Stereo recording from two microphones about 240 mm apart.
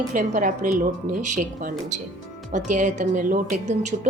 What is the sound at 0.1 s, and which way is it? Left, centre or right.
Speech, right.